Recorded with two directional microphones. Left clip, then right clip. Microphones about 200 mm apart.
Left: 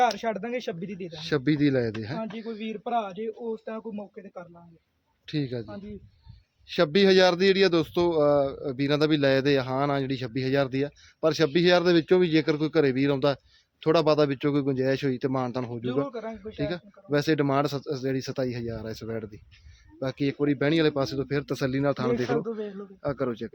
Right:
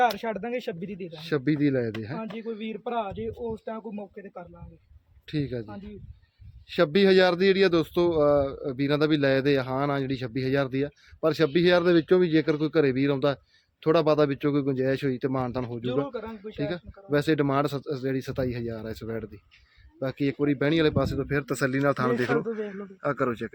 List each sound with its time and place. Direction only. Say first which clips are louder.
0.0 s speech: even; 5° right (ahead or behind)
2.1 s speech: even; 15° right (ahead or behind)
5.2 s a man's voice: even; centre (ahead or behind)
6.7 s speech: even; centre (ahead or behind)